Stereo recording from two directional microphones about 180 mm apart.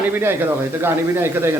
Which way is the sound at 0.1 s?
10° right (ahead or behind).